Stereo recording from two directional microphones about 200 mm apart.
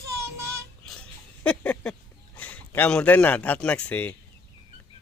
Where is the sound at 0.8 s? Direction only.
5° left (ahead or behind).